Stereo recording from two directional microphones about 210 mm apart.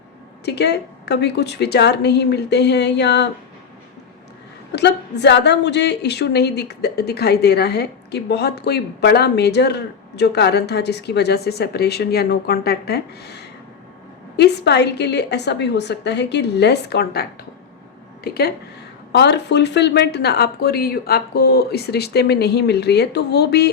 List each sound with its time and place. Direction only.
0.4 s a woman's voice: 55° left (ahead or behind)
4.7 s a woman's voice: 55° left (ahead or behind)